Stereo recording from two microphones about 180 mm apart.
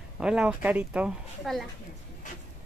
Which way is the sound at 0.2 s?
5° right (ahead or behind).